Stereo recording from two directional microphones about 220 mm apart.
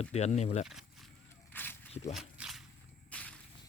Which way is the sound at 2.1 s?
Centre (ahead or behind).